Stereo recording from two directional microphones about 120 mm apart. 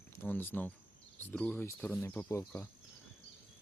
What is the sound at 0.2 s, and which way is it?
Speech, 15° left (ahead or behind).